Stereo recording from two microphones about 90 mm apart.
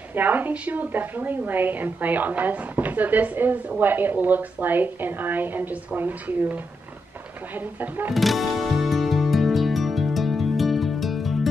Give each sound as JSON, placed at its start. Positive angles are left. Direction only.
{"t": 0.1, "sound": "a woman's voice", "side_deg": -20}
{"t": 8.1, "sound": "music", "side_deg": 0}